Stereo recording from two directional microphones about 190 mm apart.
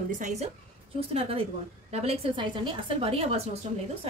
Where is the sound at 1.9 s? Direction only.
35° right (ahead or behind).